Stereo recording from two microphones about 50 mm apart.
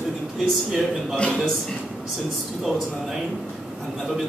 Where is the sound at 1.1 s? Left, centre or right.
Left.